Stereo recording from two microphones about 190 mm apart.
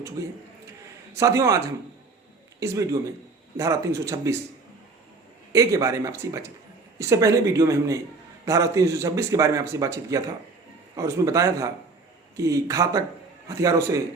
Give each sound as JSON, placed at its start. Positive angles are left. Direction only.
{"t": 0.2, "sound": "a man's voice", "side_deg": -15}
{"t": 5.5, "sound": "a man's voice", "side_deg": -15}